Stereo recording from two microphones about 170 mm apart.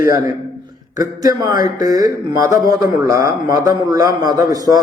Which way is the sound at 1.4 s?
20° right (ahead or behind).